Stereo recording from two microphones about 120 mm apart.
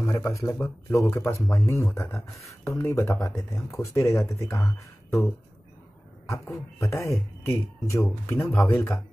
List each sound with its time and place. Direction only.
0.0 s speech: 25° left (ahead or behind)